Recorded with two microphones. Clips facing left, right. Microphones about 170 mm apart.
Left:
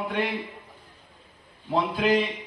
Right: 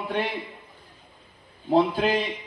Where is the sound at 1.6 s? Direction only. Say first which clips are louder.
Right 4 dB; 40° right (ahead or behind).